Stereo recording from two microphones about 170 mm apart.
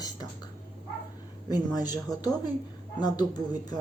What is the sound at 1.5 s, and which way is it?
Speech, 20° left (ahead or behind).